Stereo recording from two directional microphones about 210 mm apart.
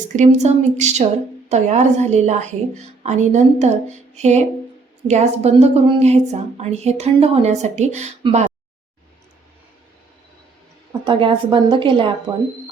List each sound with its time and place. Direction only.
0.2 s a woman's voice: 35° right (ahead or behind)
11.0 s a woman's voice: 25° right (ahead or behind)